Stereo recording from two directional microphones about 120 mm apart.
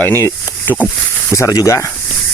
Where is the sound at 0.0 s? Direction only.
20° left (ahead or behind).